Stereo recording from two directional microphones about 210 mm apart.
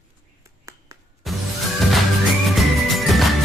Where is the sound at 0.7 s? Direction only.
15° right (ahead or behind).